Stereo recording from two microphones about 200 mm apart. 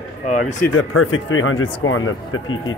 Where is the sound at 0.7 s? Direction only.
75° left (ahead or behind).